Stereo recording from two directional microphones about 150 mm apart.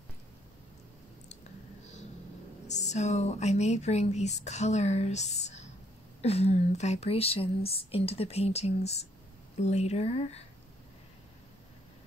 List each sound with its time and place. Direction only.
2.7 s speech: 50° left (ahead or behind)